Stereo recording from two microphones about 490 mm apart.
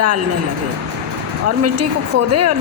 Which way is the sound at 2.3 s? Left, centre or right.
Right.